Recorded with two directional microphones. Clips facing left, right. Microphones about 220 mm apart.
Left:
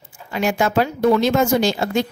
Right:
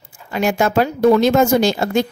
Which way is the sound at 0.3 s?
45° right (ahead or behind).